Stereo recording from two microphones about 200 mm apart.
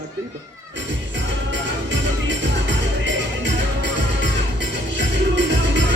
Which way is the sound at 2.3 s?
65° right (ahead or behind).